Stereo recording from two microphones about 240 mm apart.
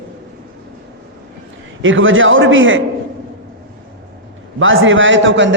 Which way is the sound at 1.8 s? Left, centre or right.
Right.